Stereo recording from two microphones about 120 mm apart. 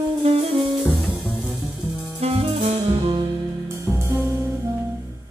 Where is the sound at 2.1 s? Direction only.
55° right (ahead or behind).